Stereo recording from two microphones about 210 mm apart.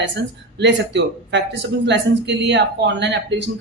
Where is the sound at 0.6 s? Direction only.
60° right (ahead or behind).